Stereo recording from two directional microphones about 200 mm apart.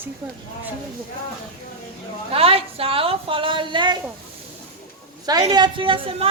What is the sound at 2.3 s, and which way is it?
A woman's voice, 30° right (ahead or behind).